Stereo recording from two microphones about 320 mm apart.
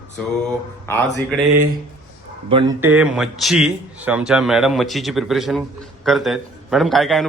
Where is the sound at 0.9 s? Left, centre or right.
Centre.